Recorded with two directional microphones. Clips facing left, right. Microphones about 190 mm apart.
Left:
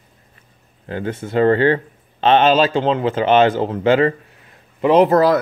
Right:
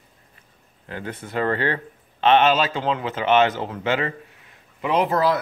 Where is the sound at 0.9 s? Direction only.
25° left (ahead or behind).